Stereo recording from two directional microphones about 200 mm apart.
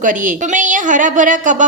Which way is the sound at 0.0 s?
40° right (ahead or behind).